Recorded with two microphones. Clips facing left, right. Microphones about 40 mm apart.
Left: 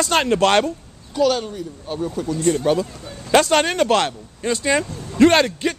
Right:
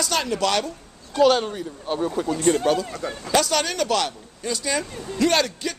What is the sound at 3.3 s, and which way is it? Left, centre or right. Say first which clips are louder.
Speech: left 6 dB; left.